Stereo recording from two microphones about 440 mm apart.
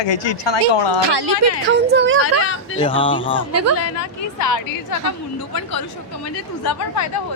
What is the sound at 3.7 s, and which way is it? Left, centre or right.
Speech, left.